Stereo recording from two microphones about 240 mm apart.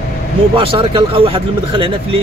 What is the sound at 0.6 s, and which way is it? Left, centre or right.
Speech, right.